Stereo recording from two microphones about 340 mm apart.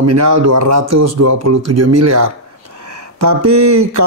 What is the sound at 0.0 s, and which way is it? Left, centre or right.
Speech, right.